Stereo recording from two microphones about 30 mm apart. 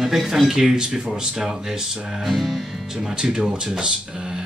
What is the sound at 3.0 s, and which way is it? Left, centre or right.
Speech, centre.